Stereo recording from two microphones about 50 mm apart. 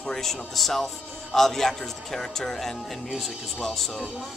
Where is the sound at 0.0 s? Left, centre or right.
Centre.